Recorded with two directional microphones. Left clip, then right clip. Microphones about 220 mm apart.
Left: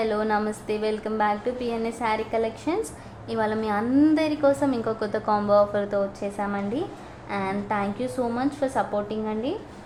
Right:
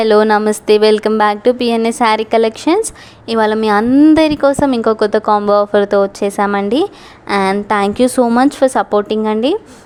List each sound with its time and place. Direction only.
0.0 s a woman's voice: 45° right (ahead or behind)